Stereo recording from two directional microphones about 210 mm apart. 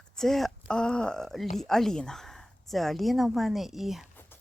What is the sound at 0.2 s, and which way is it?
Speech, centre (ahead or behind).